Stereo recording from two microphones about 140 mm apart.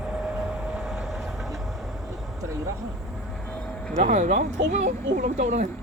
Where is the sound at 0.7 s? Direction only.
5° right (ahead or behind).